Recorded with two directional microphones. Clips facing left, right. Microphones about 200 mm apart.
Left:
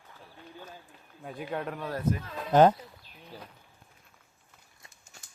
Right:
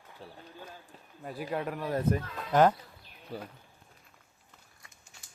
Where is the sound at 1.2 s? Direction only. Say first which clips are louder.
Right 1 dB; 5° right (ahead or behind).